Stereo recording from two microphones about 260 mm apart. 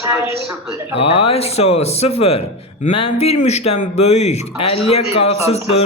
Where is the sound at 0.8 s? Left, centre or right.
Left.